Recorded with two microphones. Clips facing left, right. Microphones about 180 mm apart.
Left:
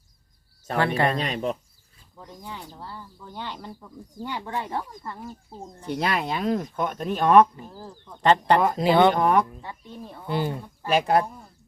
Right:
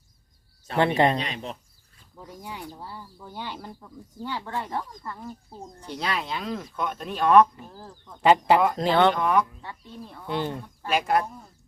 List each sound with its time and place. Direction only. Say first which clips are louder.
0.8 s speech: right 2 dB; 20° right (ahead or behind)
1.2 s speech: left 6 dB; 45° left (ahead or behind)
2.1 s speech: right 1 dB; 10° right (ahead or behind)
4.1 s speech: left 1 dB; 15° left (ahead or behind)
5.9 s speech: left 4 dB; 55° left (ahead or behind)
7.7 s speech: left 3 dB; 10° left (ahead or behind)
8.2 s speech: right 1 dB; 5° right (ahead or behind)
8.7 s speech: left 2 dB; 10° left (ahead or behind)
9.1 s speech: left 3 dB; 45° left (ahead or behind)
9.6 s speech: left 2 dB; 20° left (ahead or behind)
10.2 s speech: left 2 dB; 5° left (ahead or behind)
11.0 s speech: left 2 dB; 30° left (ahead or behind)